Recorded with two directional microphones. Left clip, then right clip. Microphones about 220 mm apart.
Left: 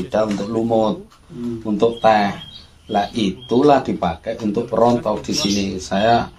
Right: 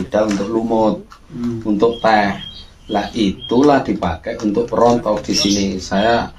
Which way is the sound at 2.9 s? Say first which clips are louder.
Right 1 dB; 45° left (ahead or behind).